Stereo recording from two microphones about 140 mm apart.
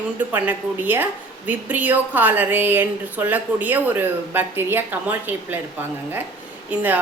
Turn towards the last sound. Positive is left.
turn(degrees=-15)  # may be behind; listen again after turning